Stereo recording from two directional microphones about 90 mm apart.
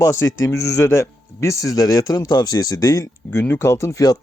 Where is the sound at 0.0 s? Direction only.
30° left (ahead or behind).